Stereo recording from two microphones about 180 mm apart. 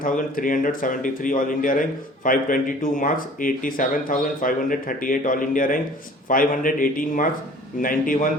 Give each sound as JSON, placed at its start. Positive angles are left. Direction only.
{"t": 0.0, "sound": "speech", "side_deg": 50}